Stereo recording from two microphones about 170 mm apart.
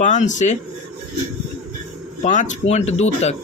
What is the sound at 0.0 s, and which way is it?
Speech, 45° left (ahead or behind).